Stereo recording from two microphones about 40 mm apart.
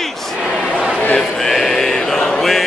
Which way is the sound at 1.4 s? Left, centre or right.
Centre.